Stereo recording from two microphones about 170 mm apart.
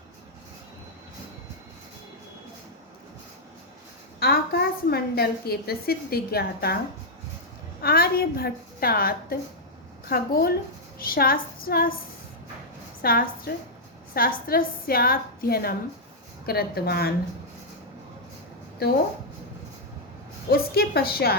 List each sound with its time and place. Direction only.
4.2 s a woman's voice: 65° left (ahead or behind)
7.8 s a woman's voice: 65° left (ahead or behind)
13.0 s a woman's voice: 60° left (ahead or behind)
18.8 s a woman's voice: 65° left (ahead or behind)
20.5 s a woman's voice: 65° left (ahead or behind)